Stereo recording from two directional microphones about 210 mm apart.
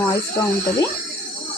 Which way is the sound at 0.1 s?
15° left (ahead or behind).